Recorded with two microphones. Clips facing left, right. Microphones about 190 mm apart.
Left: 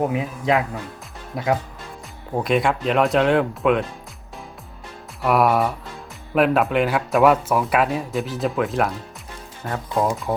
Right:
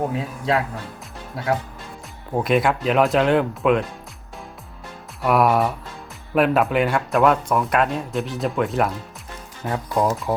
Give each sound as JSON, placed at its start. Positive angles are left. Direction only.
{"t": 0.1, "sound": "speech", "side_deg": 15}
{"t": 2.3, "sound": "speech", "side_deg": 0}
{"t": 5.2, "sound": "speech", "side_deg": 0}